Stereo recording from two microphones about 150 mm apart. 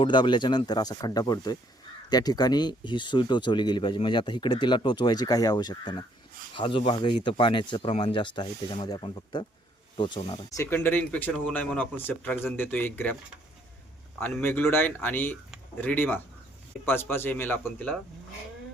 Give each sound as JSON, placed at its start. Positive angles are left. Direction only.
{"t": 0.0, "sound": "speech", "side_deg": 30}
{"t": 10.5, "sound": "speech", "side_deg": 15}
{"t": 14.2, "sound": "speech", "side_deg": 15}